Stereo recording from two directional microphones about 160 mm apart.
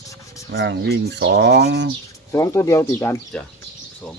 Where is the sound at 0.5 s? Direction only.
90° right.